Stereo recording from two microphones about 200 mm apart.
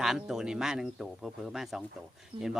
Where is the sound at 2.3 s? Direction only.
30° right (ahead or behind).